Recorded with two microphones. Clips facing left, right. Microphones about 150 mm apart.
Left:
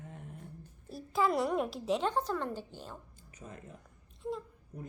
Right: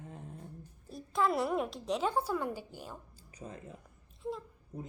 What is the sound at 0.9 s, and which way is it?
A child's voice, centre (ahead or behind).